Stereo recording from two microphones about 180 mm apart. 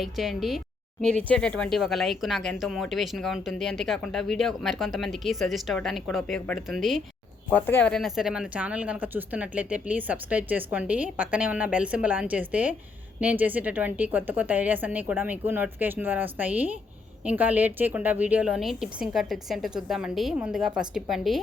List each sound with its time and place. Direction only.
0.0 s speech: centre (ahead or behind)